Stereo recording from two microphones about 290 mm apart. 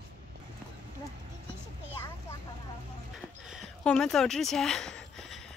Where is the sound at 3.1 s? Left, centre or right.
Centre.